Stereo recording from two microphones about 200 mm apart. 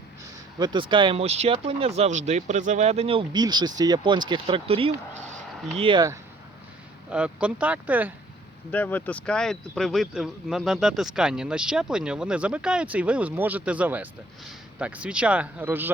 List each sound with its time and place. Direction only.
0.6 s speech: 25° right (ahead or behind)
7.1 s speech: 5° right (ahead or behind)
8.7 s speech: 10° left (ahead or behind); by 15.9 s 10° right (ahead or behind)